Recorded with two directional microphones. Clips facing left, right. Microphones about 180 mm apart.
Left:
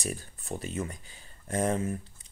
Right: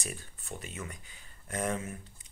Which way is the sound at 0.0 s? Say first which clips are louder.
Left 6 dB; 35° left (ahead or behind).